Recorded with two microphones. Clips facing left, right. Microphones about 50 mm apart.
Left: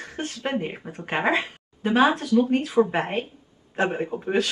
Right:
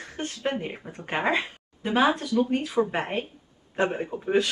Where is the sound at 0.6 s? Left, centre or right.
Centre.